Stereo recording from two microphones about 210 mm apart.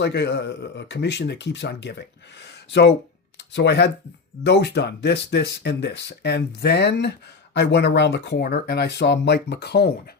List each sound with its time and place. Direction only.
0.0 s speech: 55° left (ahead or behind)